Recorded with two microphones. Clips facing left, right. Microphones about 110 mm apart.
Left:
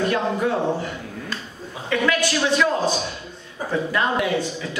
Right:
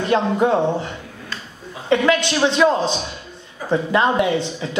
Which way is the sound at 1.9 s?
25° right (ahead or behind).